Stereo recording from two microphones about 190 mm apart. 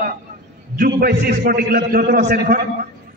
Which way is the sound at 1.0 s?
50° right (ahead or behind).